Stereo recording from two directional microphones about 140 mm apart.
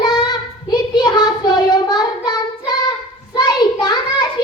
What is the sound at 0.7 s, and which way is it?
Child singing, 30° left (ahead or behind).